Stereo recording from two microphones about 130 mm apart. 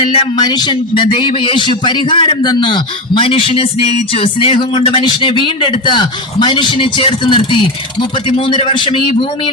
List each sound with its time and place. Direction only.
0.0 s speech: 45° left (ahead or behind)
0.4 s a man's voice: 35° left (ahead or behind)